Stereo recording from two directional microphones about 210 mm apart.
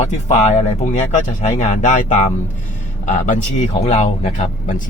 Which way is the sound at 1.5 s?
35° left (ahead or behind).